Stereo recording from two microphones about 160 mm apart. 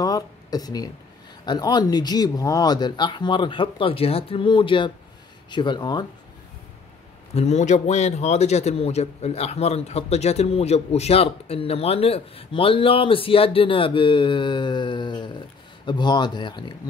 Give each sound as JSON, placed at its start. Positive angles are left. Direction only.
{"t": 0.0, "sound": "speech", "side_deg": 25}
{"t": 7.3, "sound": "a man's voice", "side_deg": 45}